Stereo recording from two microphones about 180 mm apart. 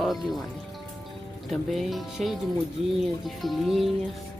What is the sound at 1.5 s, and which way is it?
Speech, centre (ahead or behind).